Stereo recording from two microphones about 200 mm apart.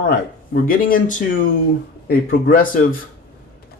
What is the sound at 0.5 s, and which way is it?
Speech, 45° left (ahead or behind).